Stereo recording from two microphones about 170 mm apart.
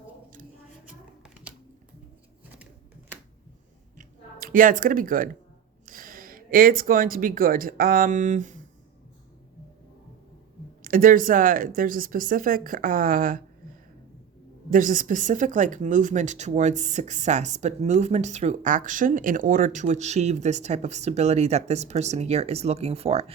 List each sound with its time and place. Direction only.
1.2 s typing: 5° right (ahead or behind)
3.9 s a sound: 55° right (ahead or behind)
5.8 s speech: 55° right (ahead or behind)
10.8 s a woman's voice: 55° right (ahead or behind)
14.7 s speech: 55° right (ahead or behind); by 23.3 s 35° right (ahead or behind)